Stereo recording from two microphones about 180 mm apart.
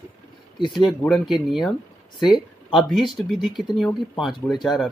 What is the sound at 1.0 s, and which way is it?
Speech, centre (ahead or behind).